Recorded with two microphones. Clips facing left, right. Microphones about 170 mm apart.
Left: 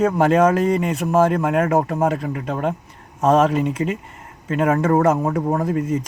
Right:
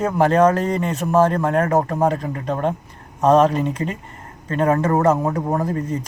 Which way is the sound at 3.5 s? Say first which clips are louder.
Left 1 dB; 40° right (ahead or behind).